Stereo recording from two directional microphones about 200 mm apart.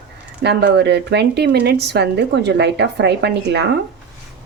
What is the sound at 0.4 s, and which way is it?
Speech, 55° right (ahead or behind).